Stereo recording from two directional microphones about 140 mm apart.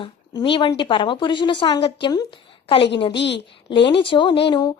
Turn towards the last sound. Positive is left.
turn(degrees=35)  # may be behind; listen again after turning